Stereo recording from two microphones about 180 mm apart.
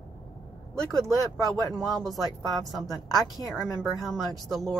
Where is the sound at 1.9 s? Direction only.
Centre (ahead or behind).